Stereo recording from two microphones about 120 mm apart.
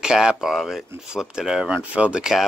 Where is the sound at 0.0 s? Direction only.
5° right (ahead or behind).